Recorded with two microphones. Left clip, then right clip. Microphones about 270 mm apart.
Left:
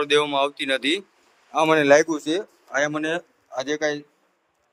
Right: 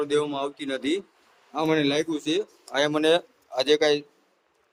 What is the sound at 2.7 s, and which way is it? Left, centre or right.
A man's voice, centre.